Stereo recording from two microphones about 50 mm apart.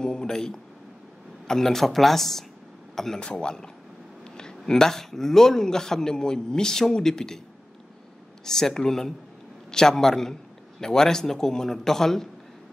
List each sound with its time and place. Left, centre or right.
0.0 s a man's voice: centre
3.2 s a man's voice: centre
8.5 s a man's voice: centre